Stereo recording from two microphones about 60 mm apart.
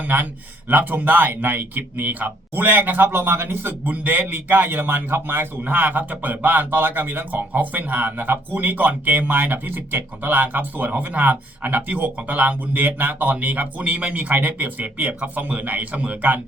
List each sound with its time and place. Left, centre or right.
0.0 s speech: right
5.6 s speech: right